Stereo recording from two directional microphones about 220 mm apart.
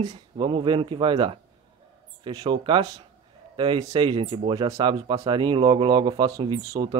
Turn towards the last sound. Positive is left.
turn(degrees=-20)  # may be behind; listen again after turning